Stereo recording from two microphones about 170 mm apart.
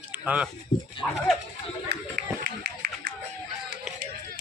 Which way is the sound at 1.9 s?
75° right (ahead or behind).